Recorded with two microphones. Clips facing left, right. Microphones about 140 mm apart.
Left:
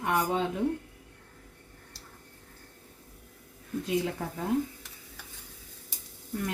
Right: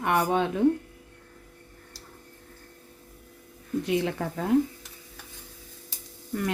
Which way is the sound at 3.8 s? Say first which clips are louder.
Right 2 dB; 75° right (ahead or behind).